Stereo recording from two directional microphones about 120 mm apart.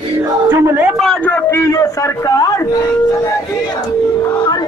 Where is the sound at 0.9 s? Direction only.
Centre (ahead or behind).